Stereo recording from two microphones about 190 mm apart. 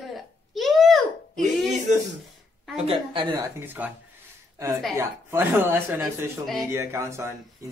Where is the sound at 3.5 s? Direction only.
10° right (ahead or behind).